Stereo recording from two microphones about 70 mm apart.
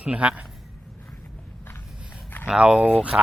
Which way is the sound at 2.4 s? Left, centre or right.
Centre.